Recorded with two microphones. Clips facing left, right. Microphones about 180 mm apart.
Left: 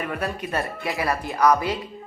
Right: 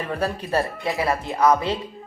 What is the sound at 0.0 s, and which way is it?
Speech, 30° right (ahead or behind).